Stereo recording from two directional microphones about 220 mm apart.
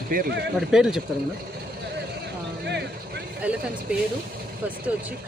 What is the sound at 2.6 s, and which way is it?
Vehicle, 50° right (ahead or behind).